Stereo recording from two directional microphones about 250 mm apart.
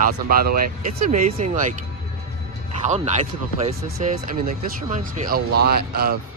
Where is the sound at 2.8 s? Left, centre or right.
Right.